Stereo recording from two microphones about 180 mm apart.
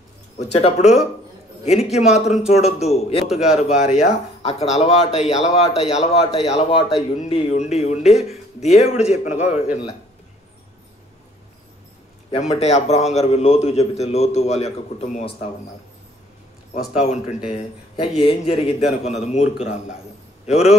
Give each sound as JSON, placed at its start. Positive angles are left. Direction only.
{"t": 0.4, "sound": "a man's voice", "side_deg": 35}
{"t": 12.3, "sound": "a man's voice", "side_deg": 35}
{"t": 16.9, "sound": "a man's voice", "side_deg": 40}